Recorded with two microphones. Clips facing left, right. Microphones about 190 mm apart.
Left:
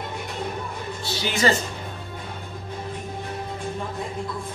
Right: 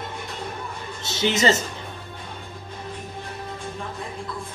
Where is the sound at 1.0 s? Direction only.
20° right (ahead or behind).